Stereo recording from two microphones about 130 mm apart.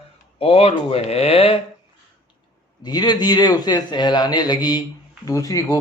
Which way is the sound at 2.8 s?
30° left (ahead or behind).